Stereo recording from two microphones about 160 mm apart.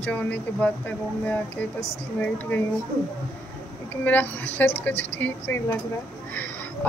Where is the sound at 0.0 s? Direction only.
10° left (ahead or behind).